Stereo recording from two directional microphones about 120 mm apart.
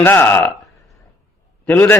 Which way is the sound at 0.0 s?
15° left (ahead or behind).